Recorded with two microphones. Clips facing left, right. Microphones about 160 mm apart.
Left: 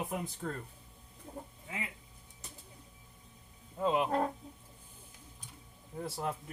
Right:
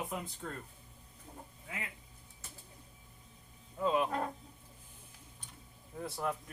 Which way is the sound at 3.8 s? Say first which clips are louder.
Left 1 dB; 25° left (ahead or behind).